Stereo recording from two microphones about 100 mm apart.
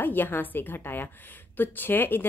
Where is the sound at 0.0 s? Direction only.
20° left (ahead or behind).